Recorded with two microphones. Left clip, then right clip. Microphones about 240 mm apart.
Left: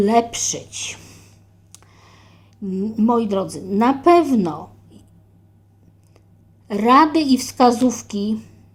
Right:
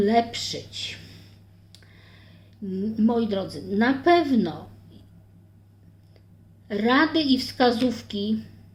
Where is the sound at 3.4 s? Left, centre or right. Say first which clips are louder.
Left 6 dB; left.